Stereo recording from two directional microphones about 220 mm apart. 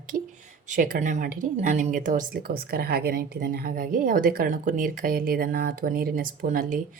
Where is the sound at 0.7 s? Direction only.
35° right (ahead or behind).